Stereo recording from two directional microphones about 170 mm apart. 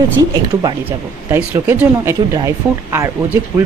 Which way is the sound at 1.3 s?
15° right (ahead or behind).